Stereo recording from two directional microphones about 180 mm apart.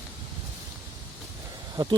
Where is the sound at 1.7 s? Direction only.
25° right (ahead or behind).